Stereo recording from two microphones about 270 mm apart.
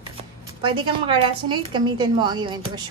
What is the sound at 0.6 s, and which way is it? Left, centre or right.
A woman's voice, centre.